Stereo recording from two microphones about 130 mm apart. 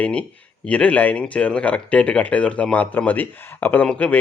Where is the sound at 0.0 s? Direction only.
10° left (ahead or behind).